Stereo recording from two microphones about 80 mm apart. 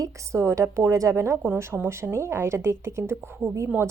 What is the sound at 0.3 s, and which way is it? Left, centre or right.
A woman's voice, right.